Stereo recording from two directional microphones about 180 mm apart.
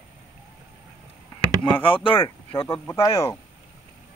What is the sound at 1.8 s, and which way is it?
Speech, 30° left (ahead or behind).